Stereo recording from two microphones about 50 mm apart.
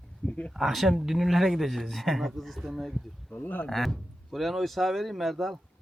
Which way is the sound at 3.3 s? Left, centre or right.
Left.